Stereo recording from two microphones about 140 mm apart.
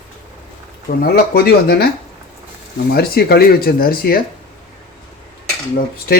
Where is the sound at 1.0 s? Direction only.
90° left.